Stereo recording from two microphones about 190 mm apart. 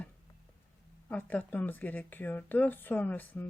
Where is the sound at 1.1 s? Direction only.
10° left (ahead or behind).